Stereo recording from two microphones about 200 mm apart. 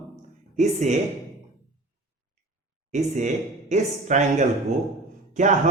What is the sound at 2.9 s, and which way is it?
A man's voice, 35° right (ahead or behind).